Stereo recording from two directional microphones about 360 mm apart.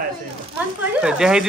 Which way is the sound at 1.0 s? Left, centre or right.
Centre.